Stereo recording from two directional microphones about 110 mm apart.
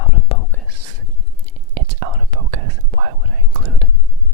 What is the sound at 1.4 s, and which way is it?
Whispering, 75° right (ahead or behind).